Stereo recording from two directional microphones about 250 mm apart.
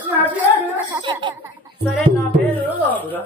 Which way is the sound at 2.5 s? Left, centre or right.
Centre.